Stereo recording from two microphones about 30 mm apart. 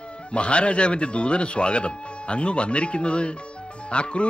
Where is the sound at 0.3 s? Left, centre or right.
Left.